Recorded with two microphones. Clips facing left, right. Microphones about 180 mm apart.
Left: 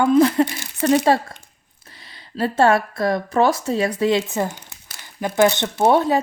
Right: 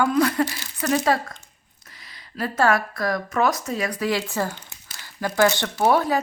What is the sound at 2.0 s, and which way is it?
A woman's voice, 30° left (ahead or behind).